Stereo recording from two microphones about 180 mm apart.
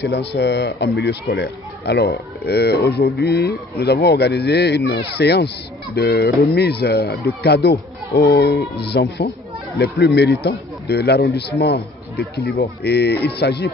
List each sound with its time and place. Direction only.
0.0 s speech: 70° left (ahead or behind)